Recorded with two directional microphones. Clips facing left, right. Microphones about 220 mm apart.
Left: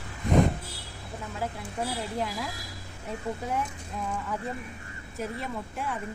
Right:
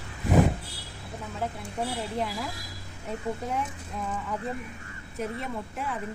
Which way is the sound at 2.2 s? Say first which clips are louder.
Right 1 dB; centre (ahead or behind).